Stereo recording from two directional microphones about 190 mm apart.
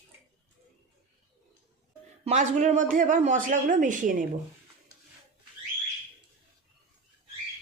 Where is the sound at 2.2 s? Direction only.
40° right (ahead or behind).